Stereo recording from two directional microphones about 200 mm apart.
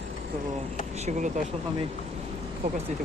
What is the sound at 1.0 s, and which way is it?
Speech, 35° right (ahead or behind).